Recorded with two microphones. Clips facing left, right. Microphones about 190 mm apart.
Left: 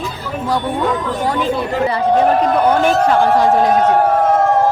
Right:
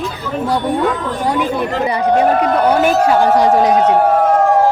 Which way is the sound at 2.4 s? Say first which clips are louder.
Even; 10° right (ahead or behind).